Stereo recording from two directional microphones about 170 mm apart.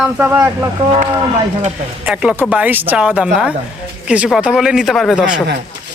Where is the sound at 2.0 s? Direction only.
10° right (ahead or behind).